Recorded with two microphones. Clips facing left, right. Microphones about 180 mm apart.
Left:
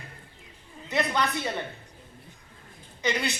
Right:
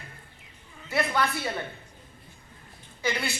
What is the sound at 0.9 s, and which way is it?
Speech, 20° left (ahead or behind).